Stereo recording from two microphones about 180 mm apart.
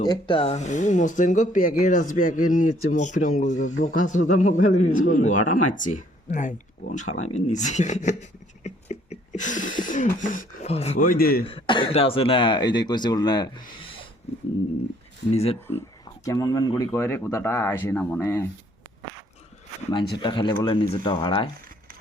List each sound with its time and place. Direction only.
0.0 s speech: 25° left (ahead or behind)
11.0 s a man's voice: 55° left (ahead or behind)
11.4 s speech: 30° left (ahead or behind)
16.2 s speech: 20° left (ahead or behind)
19.9 s speech: 25° left (ahead or behind)